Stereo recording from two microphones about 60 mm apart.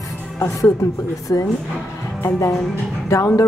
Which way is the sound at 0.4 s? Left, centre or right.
Left.